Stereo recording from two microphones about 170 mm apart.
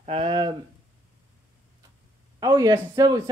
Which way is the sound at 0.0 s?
35° right (ahead or behind).